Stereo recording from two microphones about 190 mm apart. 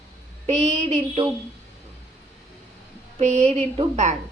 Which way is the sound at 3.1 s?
35° right (ahead or behind).